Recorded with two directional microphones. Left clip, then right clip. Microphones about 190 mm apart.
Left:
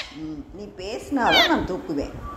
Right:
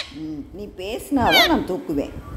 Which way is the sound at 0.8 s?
25° right (ahead or behind).